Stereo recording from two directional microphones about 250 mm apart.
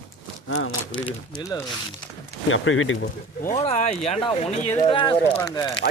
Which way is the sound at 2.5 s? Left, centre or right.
Left.